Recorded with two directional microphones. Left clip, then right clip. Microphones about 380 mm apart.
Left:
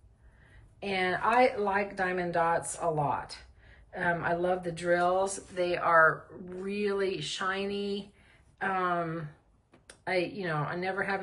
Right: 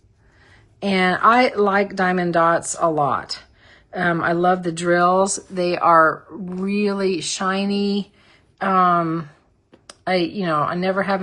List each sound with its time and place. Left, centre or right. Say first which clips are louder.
0.8 s a woman's voice: right 12 dB; centre